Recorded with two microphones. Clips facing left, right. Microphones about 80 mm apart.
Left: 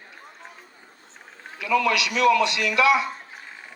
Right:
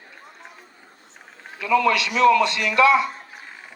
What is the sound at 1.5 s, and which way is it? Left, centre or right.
A man's voice, right.